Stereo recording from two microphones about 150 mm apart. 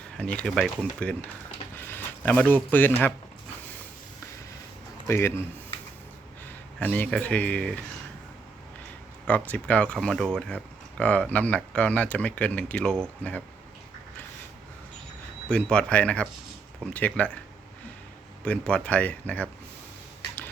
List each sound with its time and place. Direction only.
0.2 s speech: 5° left (ahead or behind)
1.7 s a sound: 15° left (ahead or behind)
2.6 s speech: 10° left (ahead or behind)
5.0 s speech: 15° left (ahead or behind)
6.7 s speech: 10° left (ahead or behind)
9.2 s speech: 10° left (ahead or behind)
15.4 s speech: 5° left (ahead or behind)
18.4 s speech: 10° left (ahead or behind)